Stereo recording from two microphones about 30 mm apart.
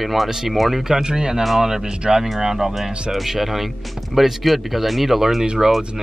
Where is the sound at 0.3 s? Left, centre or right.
Centre.